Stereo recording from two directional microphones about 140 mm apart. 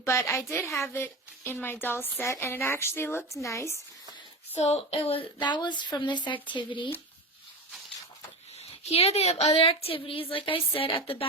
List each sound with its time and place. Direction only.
0.0 s a woman's voice: 20° left (ahead or behind)
4.5 s a woman's voice: 50° left (ahead or behind); by 6.9 s 35° left (ahead or behind)
8.8 s a woman's voice: 50° left (ahead or behind)